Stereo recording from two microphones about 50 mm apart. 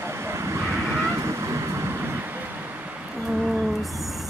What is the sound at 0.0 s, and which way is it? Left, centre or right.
Vehicle, right.